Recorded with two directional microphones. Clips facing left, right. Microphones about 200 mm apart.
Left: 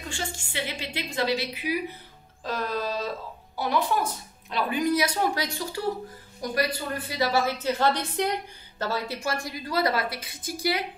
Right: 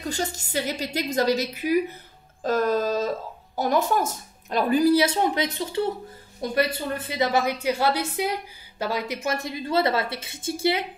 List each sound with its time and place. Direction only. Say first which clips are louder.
0.1 s speech: right 5 dB; 40° right (ahead or behind)
2.4 s music: right 7 dB; 45° right (ahead or behind)
3.5 s a woman's voice: right 3 dB; 45° right (ahead or behind); by 10.9 s 25° right (ahead or behind)